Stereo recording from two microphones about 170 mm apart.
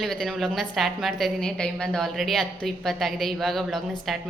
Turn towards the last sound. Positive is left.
turn(degrees=0)  # may be behind; listen again after turning